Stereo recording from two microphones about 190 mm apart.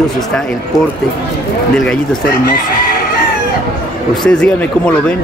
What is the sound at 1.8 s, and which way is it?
Speech, 5° left (ahead or behind).